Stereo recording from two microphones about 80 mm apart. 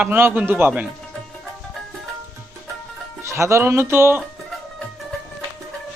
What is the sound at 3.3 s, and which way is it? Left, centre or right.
Speech, right.